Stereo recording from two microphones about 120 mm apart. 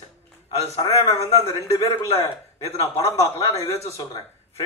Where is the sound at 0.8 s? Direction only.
25° left (ahead or behind).